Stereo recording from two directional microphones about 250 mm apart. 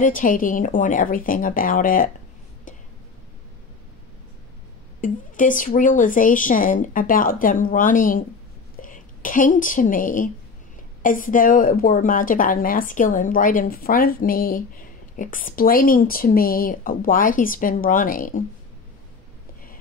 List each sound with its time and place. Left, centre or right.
0.0 s a woman's voice: left
5.0 s a woman's voice: left